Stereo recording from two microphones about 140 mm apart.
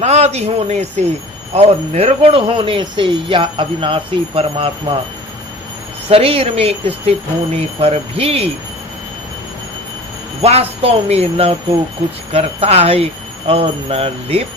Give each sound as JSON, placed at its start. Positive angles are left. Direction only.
{"t": 0.0, "sound": "speech", "side_deg": -50}
{"t": 6.1, "sound": "speech", "side_deg": -45}
{"t": 10.4, "sound": "speech", "side_deg": -45}